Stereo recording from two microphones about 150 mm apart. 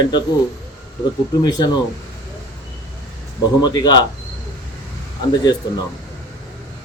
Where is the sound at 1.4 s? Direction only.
25° left (ahead or behind).